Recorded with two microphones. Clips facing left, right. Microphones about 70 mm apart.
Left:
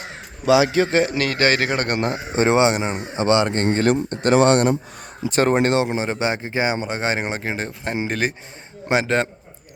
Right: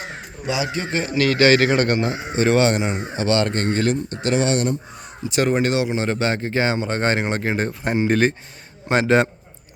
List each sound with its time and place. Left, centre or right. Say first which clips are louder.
0.4 s a man's voice: left 9 dB; left
1.2 s a man's voice: right 4 dB; left
2.0 s speech: even; left
2.3 s speech: left 1 dB; left
3.8 s speech: left 3 dB; left
5.3 s a man's voice: left 2 dB; left
6.0 s a man's voice: right 1 dB; centre